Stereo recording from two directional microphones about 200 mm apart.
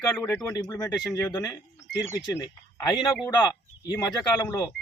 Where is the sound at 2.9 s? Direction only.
20° left (ahead or behind).